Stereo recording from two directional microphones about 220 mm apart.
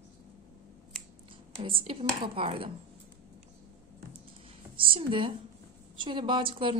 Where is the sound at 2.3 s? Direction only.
25° right (ahead or behind).